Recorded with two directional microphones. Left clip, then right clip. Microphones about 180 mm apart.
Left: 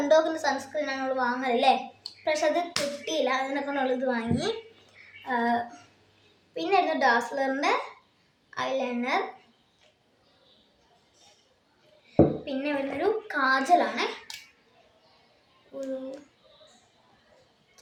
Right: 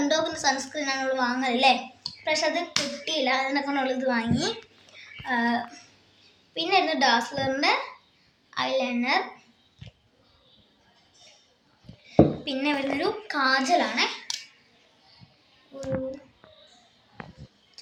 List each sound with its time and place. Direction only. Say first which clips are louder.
0.1 s a woman's voice: left 2 dB; 25° left (ahead or behind)
12.5 s a woman's voice: right 3 dB; 15° left (ahead or behind)